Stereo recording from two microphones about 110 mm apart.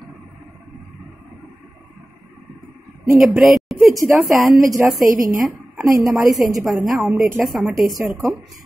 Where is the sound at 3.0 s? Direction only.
Centre (ahead or behind).